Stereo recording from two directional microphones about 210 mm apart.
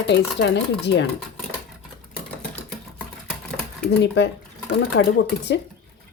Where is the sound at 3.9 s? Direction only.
55° left (ahead or behind).